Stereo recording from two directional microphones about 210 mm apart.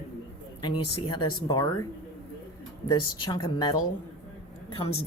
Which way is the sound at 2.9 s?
20° left (ahead or behind).